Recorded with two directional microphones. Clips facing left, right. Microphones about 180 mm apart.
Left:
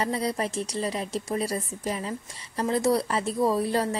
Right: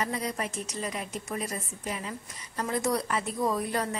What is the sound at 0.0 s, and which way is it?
A woman's voice, 30° left (ahead or behind).